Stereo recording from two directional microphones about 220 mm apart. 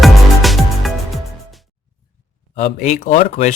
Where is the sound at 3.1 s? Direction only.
30° left (ahead or behind).